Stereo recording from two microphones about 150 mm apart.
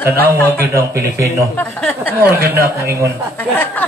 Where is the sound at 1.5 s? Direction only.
10° left (ahead or behind).